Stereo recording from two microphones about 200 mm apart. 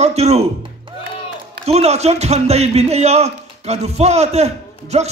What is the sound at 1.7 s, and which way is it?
A man's voice, 30° right (ahead or behind).